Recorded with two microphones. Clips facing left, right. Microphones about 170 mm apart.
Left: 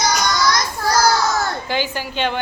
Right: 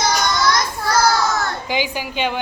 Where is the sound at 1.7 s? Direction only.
15° right (ahead or behind).